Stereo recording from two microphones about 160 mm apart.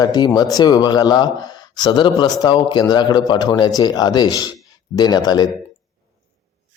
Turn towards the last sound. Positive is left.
turn(degrees=25)  # may be behind; listen again after turning